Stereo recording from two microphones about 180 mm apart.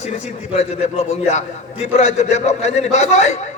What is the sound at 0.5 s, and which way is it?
A man's voice, 40° left (ahead or behind).